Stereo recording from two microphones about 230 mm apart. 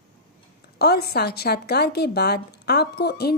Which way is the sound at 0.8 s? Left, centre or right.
Left.